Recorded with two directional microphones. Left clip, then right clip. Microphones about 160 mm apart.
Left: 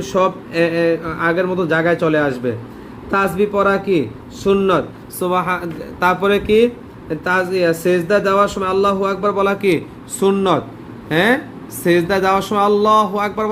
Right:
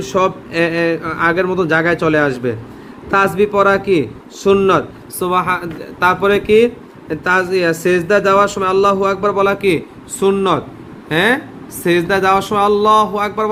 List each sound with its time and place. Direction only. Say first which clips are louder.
0.0 s speech: right 1 dB; 5° right (ahead or behind)
5.2 s speech: right 2 dB; centre (ahead or behind)